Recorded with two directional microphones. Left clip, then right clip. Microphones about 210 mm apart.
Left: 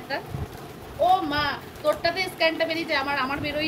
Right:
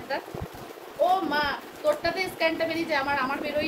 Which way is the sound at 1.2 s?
20° right (ahead or behind).